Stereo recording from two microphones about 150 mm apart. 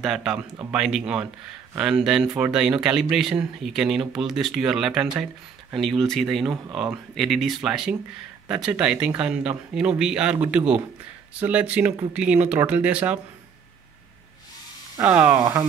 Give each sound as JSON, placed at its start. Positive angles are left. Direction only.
{"t": 0.0, "sound": "speech", "side_deg": 0}
{"t": 15.0, "sound": "speech", "side_deg": -15}